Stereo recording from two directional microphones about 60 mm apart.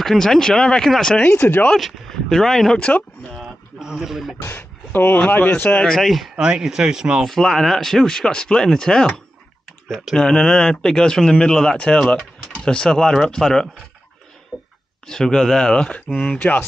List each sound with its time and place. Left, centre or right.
0.0 s speech: centre
1.1 s speech: centre
1.7 s speech: centre
2.8 s speech: centre
3.8 s a man's voice: centre
4.6 s speech: left
5.9 s a man's voice: centre
6.3 s speech: centre
7.2 s speech: centre; by 12.0 s left
12.1 s speech: centre
14.5 s a sound: centre
15.0 s speech: centre
16.3 s speech: left